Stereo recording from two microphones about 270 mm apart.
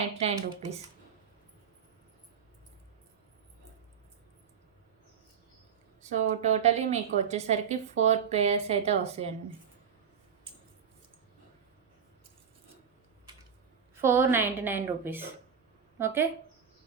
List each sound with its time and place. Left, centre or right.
0.1 s a woman's voice: right
6.0 s a woman's voice: right
13.9 s a woman's voice: centre